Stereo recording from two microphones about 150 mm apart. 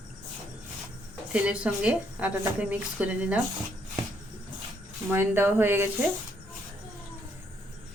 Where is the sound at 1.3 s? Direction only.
10° right (ahead or behind).